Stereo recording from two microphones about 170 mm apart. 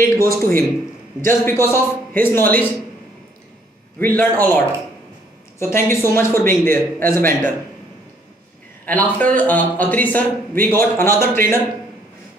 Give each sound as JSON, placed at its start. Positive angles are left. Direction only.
{"t": 0.0, "sound": "a man's voice", "side_deg": 15}
{"t": 4.0, "sound": "a man's voice", "side_deg": 10}
{"t": 8.8, "sound": "a man's voice", "side_deg": 10}